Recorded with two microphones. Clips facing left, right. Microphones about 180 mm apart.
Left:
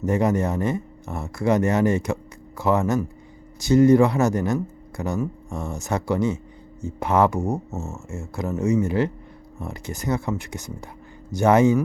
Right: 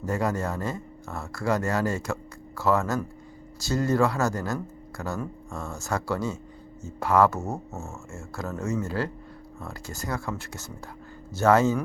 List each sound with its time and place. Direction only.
0.0 s speech: 20° left (ahead or behind)